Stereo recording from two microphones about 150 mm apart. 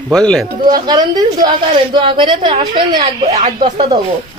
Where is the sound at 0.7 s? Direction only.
30° right (ahead or behind).